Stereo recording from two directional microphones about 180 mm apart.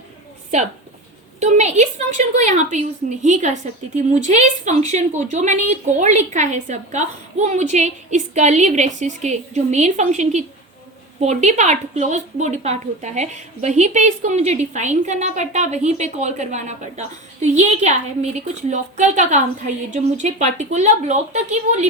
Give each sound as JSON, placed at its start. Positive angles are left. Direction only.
{"t": 1.4, "sound": "a woman's voice", "side_deg": -40}